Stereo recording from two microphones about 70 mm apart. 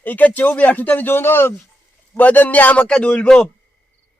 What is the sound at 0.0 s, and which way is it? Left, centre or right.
Speech, left.